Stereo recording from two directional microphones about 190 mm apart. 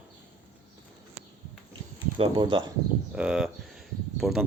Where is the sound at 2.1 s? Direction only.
25° right (ahead or behind).